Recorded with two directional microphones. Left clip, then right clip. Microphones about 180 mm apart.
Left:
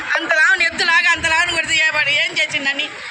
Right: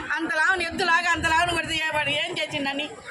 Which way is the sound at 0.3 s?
45° right (ahead or behind).